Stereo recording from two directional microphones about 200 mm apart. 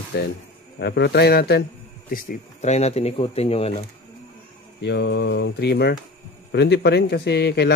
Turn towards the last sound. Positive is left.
turn(degrees=55)  # may be behind; listen again after turning